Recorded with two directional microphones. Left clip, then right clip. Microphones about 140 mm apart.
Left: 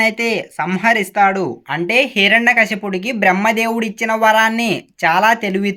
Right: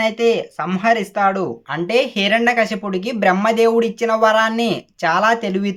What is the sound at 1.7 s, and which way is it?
Speech, 15° left (ahead or behind).